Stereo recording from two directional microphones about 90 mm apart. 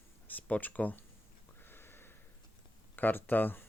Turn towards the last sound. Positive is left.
turn(degrees=20)  # may be behind; listen again after turning